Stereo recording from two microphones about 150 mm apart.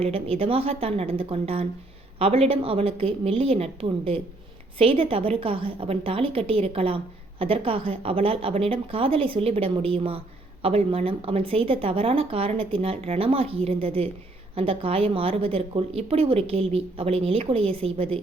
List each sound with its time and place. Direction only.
0.0 s a woman's voice: 40° right (ahead or behind)